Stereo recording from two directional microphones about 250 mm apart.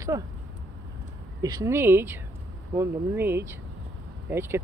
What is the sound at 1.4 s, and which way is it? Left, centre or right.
Speech, centre.